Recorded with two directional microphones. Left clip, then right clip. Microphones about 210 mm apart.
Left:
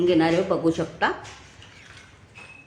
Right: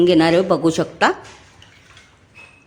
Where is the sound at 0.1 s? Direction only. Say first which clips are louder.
Right 6 dB; 50° right (ahead or behind).